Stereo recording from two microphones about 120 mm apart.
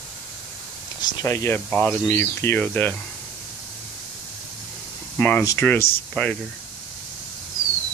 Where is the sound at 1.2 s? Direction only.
25° left (ahead or behind).